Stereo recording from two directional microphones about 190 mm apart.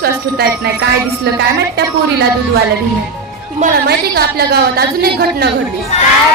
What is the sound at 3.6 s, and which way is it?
A woman's voice, 55° right (ahead or behind).